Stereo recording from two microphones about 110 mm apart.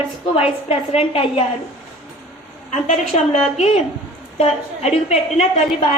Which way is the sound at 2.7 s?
90° left.